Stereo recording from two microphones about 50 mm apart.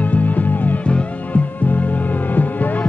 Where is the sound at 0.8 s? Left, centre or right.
Left.